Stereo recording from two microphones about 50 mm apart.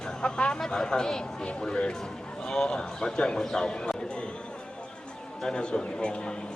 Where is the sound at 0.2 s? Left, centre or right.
Centre.